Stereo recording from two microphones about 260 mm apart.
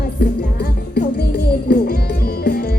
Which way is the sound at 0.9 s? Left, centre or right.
Left.